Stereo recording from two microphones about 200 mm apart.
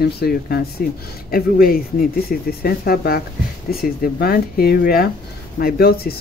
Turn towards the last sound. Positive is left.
turn(degrees=50)  # may be behind; listen again after turning